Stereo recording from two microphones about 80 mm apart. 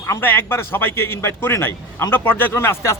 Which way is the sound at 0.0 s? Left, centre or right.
Left.